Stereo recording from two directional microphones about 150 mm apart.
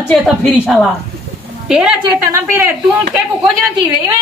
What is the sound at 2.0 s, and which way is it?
Speech, 20° right (ahead or behind).